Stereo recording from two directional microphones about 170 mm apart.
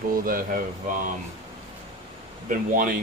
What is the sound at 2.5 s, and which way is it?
Speech, 50° right (ahead or behind).